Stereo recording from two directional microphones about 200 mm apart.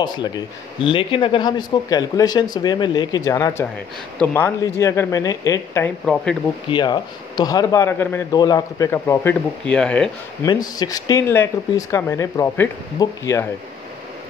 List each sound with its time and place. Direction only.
0.0 s a man's voice: 20° left (ahead or behind)
6.1 s speech: 5° left (ahead or behind)
6.7 s a man's voice: 20° left (ahead or behind); by 10.1 s 5° left (ahead or behind)
10.4 s a man's voice: 20° left (ahead or behind)